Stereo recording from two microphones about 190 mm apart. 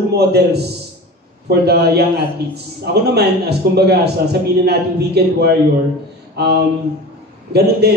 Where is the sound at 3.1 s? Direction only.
60° right (ahead or behind).